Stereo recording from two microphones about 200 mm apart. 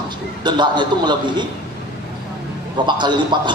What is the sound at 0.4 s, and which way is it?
A man's voice, 25° right (ahead or behind).